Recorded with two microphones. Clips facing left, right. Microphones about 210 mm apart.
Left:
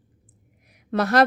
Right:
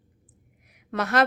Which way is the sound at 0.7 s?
35° left (ahead or behind).